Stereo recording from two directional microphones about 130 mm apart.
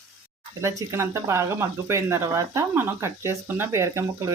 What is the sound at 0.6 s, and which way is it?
Speech, 25° right (ahead or behind).